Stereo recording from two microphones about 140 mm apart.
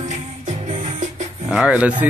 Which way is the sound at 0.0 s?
60° right (ahead or behind).